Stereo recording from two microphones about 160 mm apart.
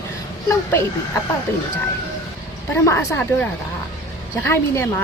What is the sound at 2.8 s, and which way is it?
Speech, 15° left (ahead or behind).